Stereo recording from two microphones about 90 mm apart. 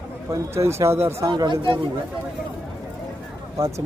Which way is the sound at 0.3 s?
30° right (ahead or behind).